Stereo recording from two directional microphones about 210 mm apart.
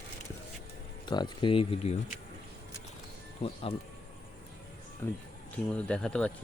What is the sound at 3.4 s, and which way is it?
Speech, 25° left (ahead or behind).